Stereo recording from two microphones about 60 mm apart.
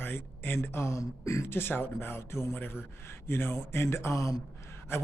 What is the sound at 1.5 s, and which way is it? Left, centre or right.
Speech, left.